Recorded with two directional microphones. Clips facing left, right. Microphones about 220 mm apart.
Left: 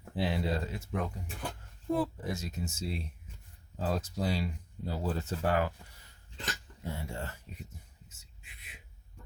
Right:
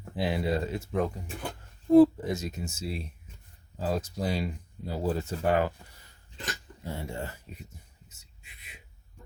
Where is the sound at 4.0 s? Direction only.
15° right (ahead or behind).